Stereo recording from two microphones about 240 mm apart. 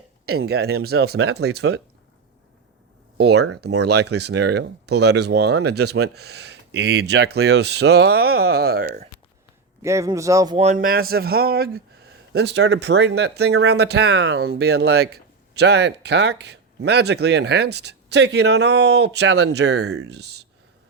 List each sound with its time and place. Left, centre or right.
0.3 s speech: right
3.2 s speech: right
9.8 s speech: centre; by 20.5 s right